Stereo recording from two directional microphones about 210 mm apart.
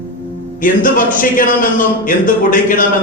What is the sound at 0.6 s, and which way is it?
A man's voice, 40° left (ahead or behind).